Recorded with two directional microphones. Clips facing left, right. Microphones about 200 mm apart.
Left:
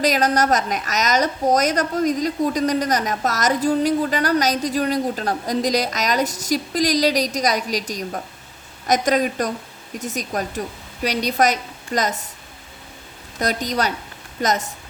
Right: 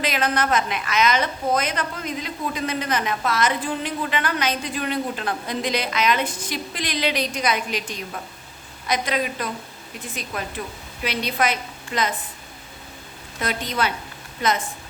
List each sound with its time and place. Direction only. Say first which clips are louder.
0.0 s a woman's voice: left 5 dB; 40° left (ahead or behind)
13.4 s a woman's voice: left 3 dB; 40° left (ahead or behind)